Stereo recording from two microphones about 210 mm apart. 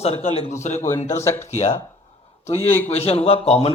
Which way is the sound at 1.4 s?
30° left (ahead or behind).